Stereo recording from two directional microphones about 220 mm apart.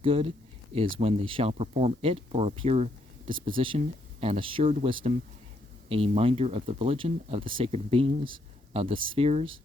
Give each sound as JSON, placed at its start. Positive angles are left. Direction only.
{"t": 0.0, "sound": "speech", "side_deg": -25}